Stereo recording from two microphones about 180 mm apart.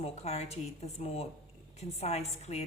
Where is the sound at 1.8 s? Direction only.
35° left (ahead or behind).